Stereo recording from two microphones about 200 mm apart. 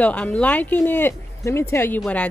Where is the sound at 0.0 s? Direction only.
5° left (ahead or behind).